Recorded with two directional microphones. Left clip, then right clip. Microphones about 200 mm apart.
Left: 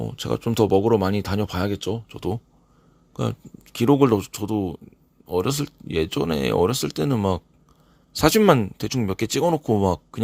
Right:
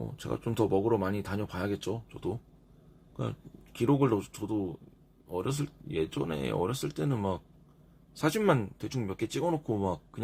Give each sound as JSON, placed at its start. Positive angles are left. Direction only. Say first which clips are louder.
{"t": 0.1, "sound": "speech", "louder": "left 10 dB", "side_deg": 45}